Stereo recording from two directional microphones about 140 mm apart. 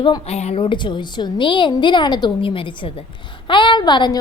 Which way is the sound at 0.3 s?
50° left (ahead or behind).